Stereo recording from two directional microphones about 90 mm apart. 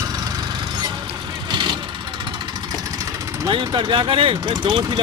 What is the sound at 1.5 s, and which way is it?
Vehicle, 55° right (ahead or behind).